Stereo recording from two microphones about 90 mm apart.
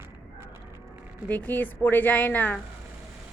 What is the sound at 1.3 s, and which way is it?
A woman's voice, 20° left (ahead or behind).